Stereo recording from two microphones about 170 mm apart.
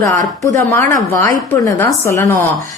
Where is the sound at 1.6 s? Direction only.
15° left (ahead or behind).